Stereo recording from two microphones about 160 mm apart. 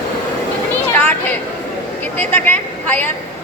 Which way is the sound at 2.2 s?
10° left (ahead or behind).